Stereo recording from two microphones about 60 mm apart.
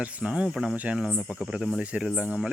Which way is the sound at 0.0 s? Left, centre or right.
Centre.